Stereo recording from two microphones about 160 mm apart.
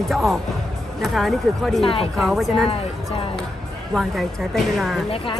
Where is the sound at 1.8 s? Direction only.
35° left (ahead or behind).